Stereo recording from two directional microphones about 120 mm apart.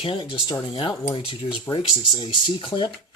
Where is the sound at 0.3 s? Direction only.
25° left (ahead or behind).